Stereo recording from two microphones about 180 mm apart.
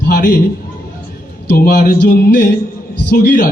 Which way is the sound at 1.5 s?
55° left (ahead or behind).